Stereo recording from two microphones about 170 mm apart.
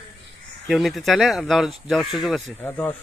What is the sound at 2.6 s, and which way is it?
Speech, 10° left (ahead or behind).